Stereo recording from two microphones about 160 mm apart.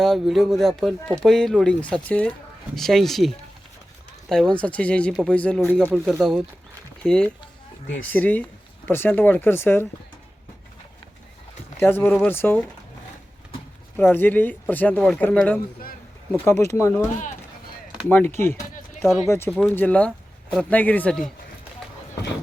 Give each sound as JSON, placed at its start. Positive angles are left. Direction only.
{"t": 0.0, "sound": "speech", "side_deg": 0}
{"t": 11.8, "sound": "speech", "side_deg": 15}
{"t": 13.9, "sound": "speech", "side_deg": 10}
{"t": 18.1, "sound": "speech", "side_deg": 15}
{"t": 19.0, "sound": "speech", "side_deg": 0}
{"t": 19.3, "sound": "speech", "side_deg": 15}